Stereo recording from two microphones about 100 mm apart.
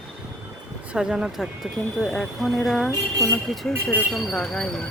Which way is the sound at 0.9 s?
5° right (ahead or behind).